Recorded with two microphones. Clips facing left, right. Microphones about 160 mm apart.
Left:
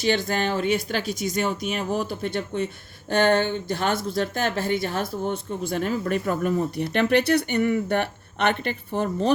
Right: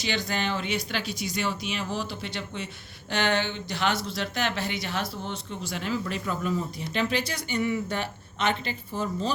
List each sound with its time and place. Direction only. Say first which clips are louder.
0.0 s speech: left 6 dB; 50° left (ahead or behind)